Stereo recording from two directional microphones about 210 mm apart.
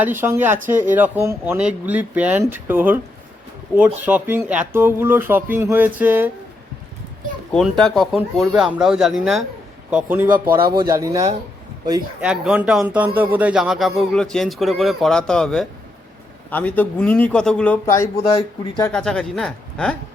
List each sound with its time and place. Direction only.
0.0 s speech: 10° right (ahead or behind)
7.5 s a man's voice: centre (ahead or behind)
10.3 s speech: 45° right (ahead or behind)
10.8 s speech: 15° right (ahead or behind)
12.2 s a man's voice: 5° right (ahead or behind); by 18.9 s 15° left (ahead or behind)
18.9 s a man's voice: 5° left (ahead or behind)